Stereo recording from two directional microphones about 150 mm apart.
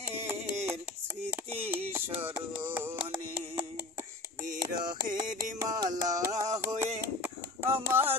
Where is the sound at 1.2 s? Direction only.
10° right (ahead or behind).